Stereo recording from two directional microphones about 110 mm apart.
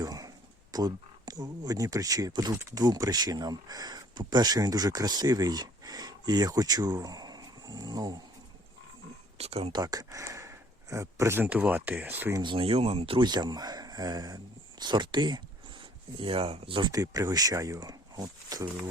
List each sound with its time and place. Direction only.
0.0 s a sound: 35° right (ahead or behind)
0.7 s speech: 35° right (ahead or behind)
9.4 s speech: 70° right (ahead or behind)
9.7 s speech: 35° right (ahead or behind)
11.4 s speech: 15° right (ahead or behind)
12.4 s speech: 50° right (ahead or behind)
16.9 s speech: 35° right (ahead or behind)